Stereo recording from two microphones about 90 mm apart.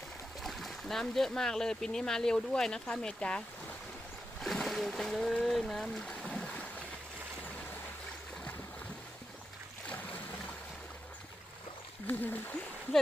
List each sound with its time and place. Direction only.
0.4 s speech: centre (ahead or behind)
4.4 s a sound: 5° left (ahead or behind)
12.0 s speech: 20° left (ahead or behind)